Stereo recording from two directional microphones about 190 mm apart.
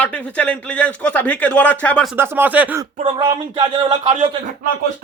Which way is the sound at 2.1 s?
10° right (ahead or behind).